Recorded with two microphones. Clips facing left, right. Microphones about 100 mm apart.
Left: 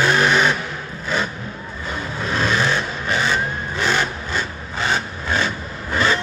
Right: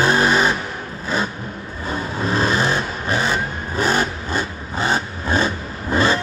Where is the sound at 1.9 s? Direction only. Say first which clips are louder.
Right 3 dB; 35° right (ahead or behind).